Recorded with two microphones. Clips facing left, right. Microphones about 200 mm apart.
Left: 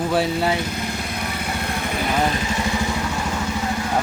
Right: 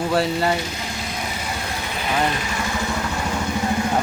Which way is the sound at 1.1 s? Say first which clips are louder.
Left 2 dB; 60° left (ahead or behind).